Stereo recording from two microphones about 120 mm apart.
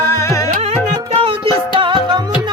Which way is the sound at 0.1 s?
25° left (ahead or behind).